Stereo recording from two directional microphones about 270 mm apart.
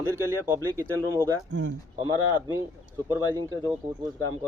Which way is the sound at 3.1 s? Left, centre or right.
Centre.